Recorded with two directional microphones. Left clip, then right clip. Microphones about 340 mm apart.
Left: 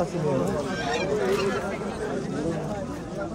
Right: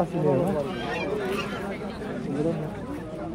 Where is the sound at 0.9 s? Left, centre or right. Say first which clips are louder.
Left 5 dB; left.